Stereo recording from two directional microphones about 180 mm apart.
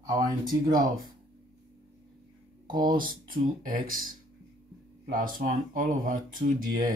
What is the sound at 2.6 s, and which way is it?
Speech, 25° right (ahead or behind).